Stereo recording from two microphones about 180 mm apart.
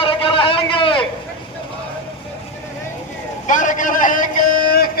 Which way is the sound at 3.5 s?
45° left (ahead or behind).